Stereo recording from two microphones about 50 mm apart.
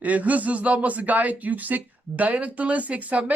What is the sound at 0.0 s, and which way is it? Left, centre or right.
Speech, right.